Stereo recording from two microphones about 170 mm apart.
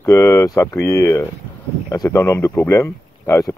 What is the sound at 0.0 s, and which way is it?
A man's voice, 15° left (ahead or behind).